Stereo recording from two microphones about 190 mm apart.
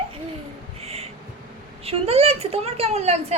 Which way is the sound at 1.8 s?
30° right (ahead or behind).